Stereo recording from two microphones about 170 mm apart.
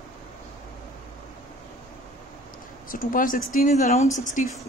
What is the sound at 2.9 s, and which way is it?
A woman's voice, 55° left (ahead or behind).